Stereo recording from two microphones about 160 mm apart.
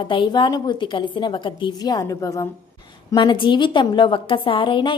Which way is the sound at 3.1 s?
30° left (ahead or behind).